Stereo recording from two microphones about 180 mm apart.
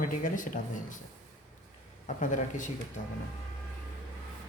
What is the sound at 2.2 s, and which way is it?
Speech, 45° left (ahead or behind).